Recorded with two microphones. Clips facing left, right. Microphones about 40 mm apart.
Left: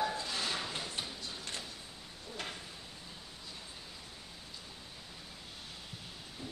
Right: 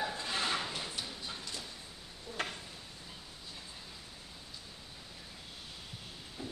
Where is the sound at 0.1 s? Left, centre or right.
Right.